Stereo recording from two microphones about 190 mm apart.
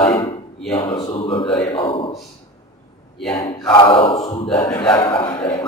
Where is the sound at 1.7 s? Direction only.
30° left (ahead or behind).